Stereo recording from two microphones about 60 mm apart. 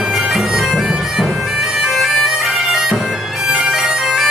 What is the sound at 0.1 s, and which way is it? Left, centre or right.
Bagpipes, centre.